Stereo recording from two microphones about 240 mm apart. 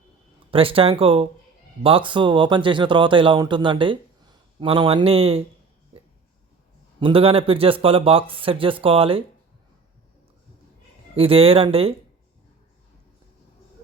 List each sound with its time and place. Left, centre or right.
0.5 s a man's voice: right
7.0 s a man's voice: right
11.2 s a man's voice: right